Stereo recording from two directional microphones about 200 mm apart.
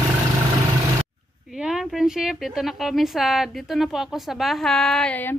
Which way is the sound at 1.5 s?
5° right (ahead or behind).